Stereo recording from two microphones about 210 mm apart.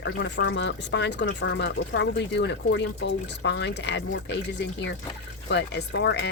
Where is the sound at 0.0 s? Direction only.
60° left (ahead or behind).